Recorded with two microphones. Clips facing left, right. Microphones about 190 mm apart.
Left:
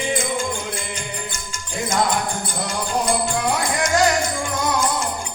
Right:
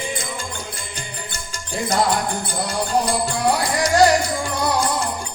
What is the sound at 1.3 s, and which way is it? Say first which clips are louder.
Music: right 1 dB; 35° right (ahead or behind).